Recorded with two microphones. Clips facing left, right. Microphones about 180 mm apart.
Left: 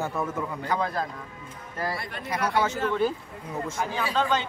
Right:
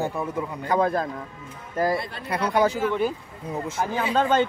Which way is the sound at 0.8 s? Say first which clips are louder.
Right 9 dB; 50° right (ahead or behind).